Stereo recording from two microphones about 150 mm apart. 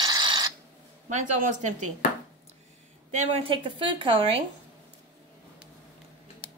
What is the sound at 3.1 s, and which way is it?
A woman's voice, 45° right (ahead or behind).